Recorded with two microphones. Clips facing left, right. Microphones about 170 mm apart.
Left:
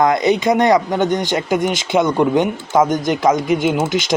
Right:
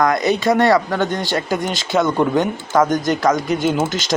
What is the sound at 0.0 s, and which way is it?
Speech, 20° left (ahead or behind).